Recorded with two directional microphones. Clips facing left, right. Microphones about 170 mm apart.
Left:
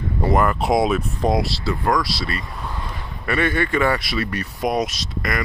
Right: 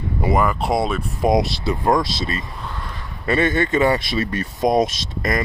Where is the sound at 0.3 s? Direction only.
Centre (ahead or behind).